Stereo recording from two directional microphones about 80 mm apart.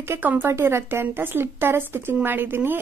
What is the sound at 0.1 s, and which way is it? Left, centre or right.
A woman's voice, right.